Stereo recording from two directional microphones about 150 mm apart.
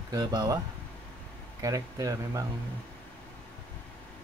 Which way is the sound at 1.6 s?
20° right (ahead or behind).